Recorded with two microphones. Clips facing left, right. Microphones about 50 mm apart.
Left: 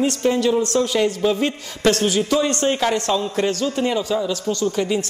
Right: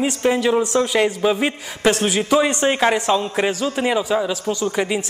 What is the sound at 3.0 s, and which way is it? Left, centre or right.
A man's voice, centre.